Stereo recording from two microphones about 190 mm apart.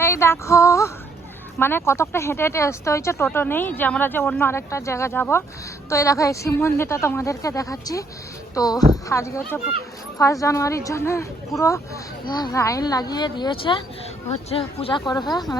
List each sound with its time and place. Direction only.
0.0 s female singing: 15° left (ahead or behind)
1.5 s speech: 10° left (ahead or behind)